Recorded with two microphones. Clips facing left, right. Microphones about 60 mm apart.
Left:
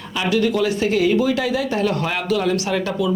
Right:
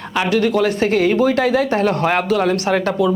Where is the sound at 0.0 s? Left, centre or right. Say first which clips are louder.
Right 3 dB; right.